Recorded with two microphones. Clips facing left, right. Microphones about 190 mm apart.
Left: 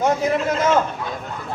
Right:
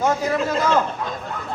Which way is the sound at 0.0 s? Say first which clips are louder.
Left 1 dB; 20° left (ahead or behind).